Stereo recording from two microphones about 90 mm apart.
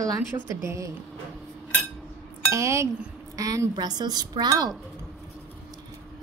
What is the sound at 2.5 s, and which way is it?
Speech, 35° right (ahead or behind).